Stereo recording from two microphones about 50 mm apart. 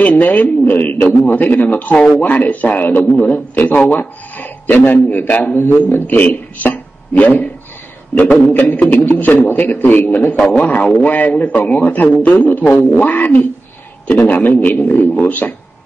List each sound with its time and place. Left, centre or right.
0.0 s a man's voice: left
2.0 s a man's voice: centre
2.2 s a man's voice: left
10.6 s a man's voice: left